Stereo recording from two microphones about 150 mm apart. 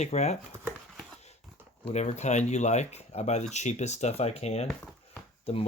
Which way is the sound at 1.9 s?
50° left (ahead or behind).